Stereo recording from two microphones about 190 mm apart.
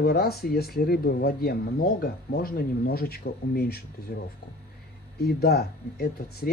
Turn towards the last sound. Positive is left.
turn(degrees=55)  # may be behind; listen again after turning